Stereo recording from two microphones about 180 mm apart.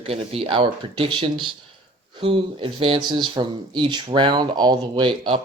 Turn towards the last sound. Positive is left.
turn(degrees=-25)  # may be behind; listen again after turning